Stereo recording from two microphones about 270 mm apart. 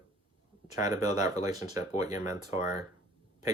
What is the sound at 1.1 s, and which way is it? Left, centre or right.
Speech, centre.